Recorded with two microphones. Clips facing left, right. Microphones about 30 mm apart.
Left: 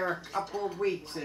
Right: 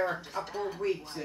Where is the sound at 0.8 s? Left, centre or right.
Left.